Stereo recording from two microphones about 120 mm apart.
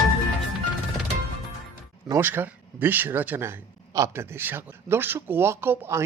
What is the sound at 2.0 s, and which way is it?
Speech, 20° right (ahead or behind).